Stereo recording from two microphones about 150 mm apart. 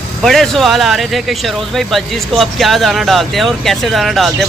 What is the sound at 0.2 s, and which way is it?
Speech, centre (ahead or behind).